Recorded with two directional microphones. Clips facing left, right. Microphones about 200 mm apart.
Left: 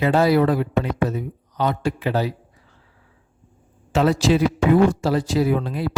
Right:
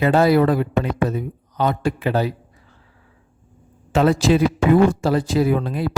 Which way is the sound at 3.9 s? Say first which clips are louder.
Right 2 dB; 50° right (ahead or behind).